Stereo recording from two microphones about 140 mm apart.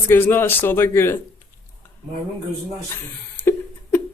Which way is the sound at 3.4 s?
15° left (ahead or behind).